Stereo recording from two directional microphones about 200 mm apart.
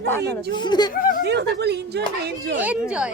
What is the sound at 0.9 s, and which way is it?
Speech, 45° left (ahead or behind).